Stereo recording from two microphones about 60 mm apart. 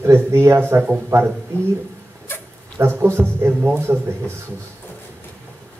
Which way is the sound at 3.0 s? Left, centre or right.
Right.